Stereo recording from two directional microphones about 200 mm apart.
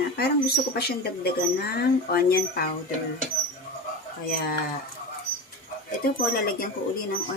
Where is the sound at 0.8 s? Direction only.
50° left (ahead or behind).